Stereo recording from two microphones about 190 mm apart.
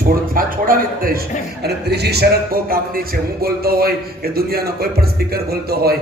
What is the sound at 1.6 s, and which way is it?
A man's voice, 60° right (ahead or behind).